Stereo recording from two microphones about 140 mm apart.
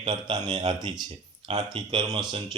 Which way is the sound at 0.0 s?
35° right (ahead or behind).